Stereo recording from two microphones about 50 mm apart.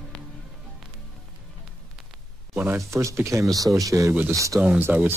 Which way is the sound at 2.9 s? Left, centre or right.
Right.